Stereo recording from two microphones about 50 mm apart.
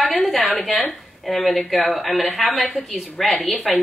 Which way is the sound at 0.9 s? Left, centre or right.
Centre.